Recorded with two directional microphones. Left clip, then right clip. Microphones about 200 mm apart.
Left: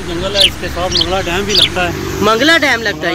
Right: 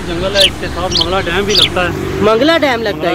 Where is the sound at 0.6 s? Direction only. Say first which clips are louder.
Even; 55° left (ahead or behind).